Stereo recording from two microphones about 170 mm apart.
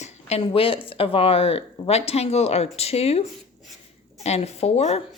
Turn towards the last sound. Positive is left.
turn(degrees=40)  # may be behind; listen again after turning